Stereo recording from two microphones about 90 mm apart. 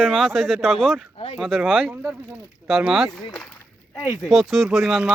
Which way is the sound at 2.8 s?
10° right (ahead or behind).